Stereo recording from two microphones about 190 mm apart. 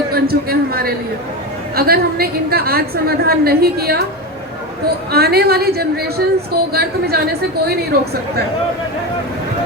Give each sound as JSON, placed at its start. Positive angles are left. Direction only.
{"t": 0.1, "sound": "a man's voice", "side_deg": -50}
{"t": 5.1, "sound": "a woman's voice", "side_deg": -55}